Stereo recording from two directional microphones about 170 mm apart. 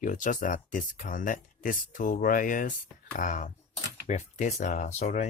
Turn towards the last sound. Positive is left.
turn(degrees=45)  # may be behind; listen again after turning